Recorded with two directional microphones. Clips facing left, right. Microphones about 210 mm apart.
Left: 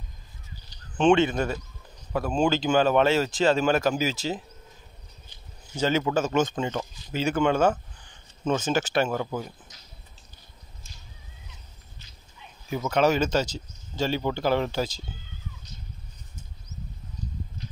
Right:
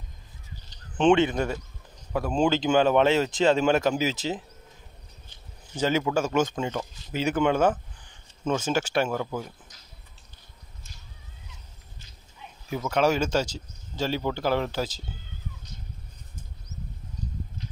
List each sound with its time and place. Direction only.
0.9 s speech: 20° right (ahead or behind)
5.8 s speech: 10° right (ahead or behind)
9.1 s speech: 5° left (ahead or behind)
12.6 s speech: 5° left (ahead or behind)